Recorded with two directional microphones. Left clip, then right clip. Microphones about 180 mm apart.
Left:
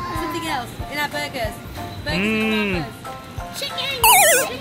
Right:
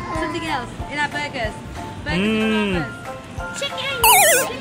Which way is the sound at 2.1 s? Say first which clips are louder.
Even; 5° right (ahead or behind).